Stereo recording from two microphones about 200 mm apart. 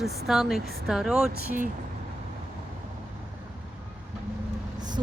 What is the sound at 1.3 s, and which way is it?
Speech, 40° right (ahead or behind).